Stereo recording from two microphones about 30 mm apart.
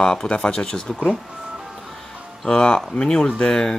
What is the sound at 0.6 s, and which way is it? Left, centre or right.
Speech, left.